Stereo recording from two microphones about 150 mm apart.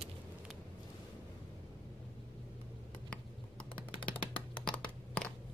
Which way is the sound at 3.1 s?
10° left (ahead or behind).